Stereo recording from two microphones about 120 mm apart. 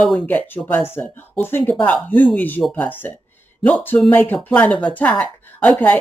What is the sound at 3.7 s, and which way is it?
Speech, 15° left (ahead or behind).